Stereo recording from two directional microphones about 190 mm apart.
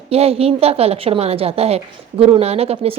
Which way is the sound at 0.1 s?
30° right (ahead or behind).